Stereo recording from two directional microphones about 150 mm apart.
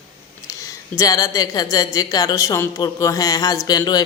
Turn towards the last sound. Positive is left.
turn(degrees=25)  # may be behind; listen again after turning